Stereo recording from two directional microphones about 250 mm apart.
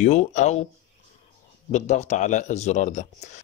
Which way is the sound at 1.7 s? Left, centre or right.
Left.